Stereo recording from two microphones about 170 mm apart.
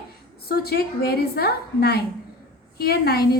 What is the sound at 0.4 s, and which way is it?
A woman's voice, 65° left (ahead or behind).